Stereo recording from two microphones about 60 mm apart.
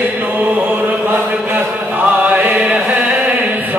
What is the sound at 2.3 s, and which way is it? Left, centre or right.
Chant, right.